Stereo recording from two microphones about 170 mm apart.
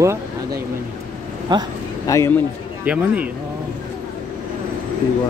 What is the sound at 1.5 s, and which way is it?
Speech, 25° right (ahead or behind).